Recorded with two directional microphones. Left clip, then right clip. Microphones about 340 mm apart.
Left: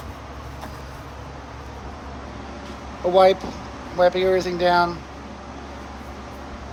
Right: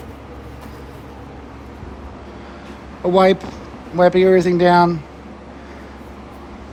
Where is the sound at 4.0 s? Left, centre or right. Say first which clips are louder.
Right 6 dB; right.